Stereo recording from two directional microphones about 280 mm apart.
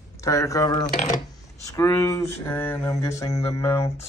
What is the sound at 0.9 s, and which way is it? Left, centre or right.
Speech, left.